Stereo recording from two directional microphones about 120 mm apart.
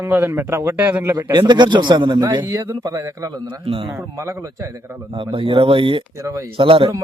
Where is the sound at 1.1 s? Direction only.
40° right (ahead or behind).